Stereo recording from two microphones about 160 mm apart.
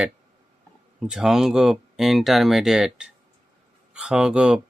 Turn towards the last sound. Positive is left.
turn(degrees=-5)  # may be behind; listen again after turning